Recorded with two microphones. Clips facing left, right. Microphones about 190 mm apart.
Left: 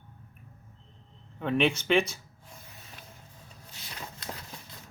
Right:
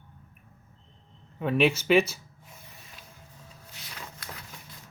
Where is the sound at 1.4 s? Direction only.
5° right (ahead or behind).